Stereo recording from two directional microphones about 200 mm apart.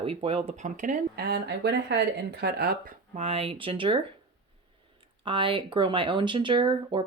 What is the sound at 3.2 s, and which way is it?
Speech, 30° right (ahead or behind).